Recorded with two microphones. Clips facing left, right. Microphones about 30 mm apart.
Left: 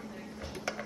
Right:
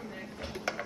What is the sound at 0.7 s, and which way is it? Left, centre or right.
Music, centre.